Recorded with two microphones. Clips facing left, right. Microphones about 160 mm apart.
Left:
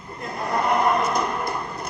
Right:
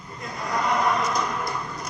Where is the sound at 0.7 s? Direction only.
30° left (ahead or behind).